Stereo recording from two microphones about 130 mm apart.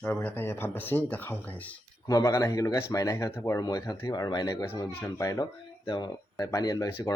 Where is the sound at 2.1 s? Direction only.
25° left (ahead or behind).